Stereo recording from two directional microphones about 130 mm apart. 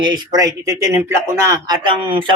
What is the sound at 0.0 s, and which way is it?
Speech, 30° right (ahead or behind).